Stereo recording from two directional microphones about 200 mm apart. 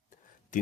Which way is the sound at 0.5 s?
40° left (ahead or behind).